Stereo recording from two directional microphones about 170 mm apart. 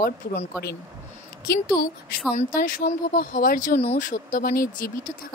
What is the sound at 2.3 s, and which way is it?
Speech, 55° left (ahead or behind).